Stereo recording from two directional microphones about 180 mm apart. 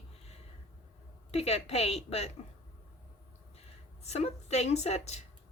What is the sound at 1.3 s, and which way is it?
A woman's voice, 35° left (ahead or behind).